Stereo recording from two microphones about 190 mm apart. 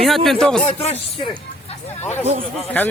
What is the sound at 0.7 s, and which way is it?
Speech, 30° left (ahead or behind).